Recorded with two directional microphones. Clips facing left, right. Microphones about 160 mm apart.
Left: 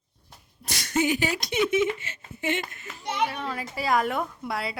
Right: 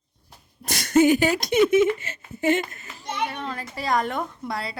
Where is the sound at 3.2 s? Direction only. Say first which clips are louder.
Left 1 dB; 5° left (ahead or behind).